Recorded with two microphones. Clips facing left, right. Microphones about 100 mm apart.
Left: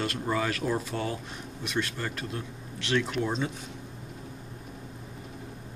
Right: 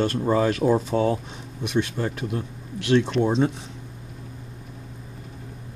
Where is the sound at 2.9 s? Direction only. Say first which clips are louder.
Right 8 dB; 30° right (ahead or behind).